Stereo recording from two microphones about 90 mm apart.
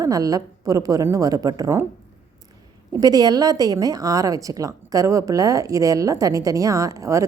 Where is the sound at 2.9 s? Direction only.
45° right (ahead or behind).